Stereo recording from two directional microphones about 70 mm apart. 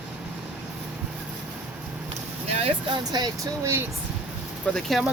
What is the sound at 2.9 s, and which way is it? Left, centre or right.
Speech, right.